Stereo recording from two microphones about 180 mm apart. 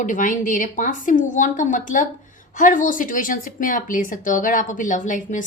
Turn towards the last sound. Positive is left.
turn(degrees=45)  # may be behind; listen again after turning